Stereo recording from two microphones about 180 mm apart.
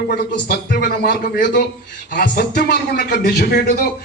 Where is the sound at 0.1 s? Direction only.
50° left (ahead or behind).